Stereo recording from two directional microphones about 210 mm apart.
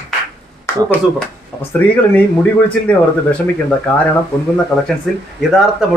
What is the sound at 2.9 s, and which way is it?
A man's voice, 5° left (ahead or behind).